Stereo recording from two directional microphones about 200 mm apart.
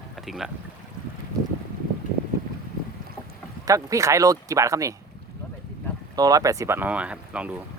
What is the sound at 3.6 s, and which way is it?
Speech, 15° right (ahead or behind).